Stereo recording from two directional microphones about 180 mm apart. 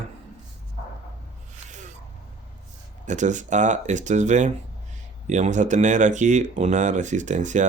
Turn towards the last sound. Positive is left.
turn(degrees=-40)  # may be behind; listen again after turning